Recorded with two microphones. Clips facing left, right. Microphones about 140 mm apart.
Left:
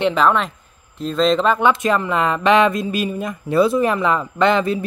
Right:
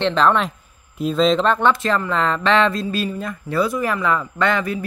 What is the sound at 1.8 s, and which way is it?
Speech, 15° left (ahead or behind).